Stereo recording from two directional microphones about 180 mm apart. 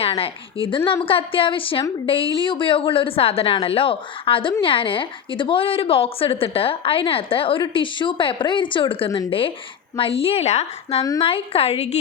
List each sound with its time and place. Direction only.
0.0 s a woman's voice: 30° left (ahead or behind)